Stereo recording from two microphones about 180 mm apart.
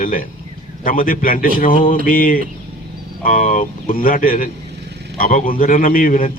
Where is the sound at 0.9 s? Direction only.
50° left (ahead or behind).